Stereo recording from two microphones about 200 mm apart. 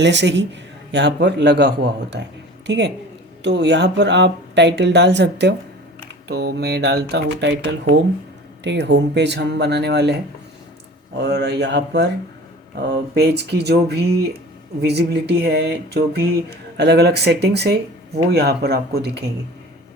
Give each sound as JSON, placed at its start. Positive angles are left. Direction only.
{"t": 0.0, "sound": "a woman's voice", "side_deg": -60}